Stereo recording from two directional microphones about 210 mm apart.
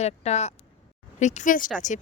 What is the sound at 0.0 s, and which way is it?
A woman's voice, 30° left (ahead or behind).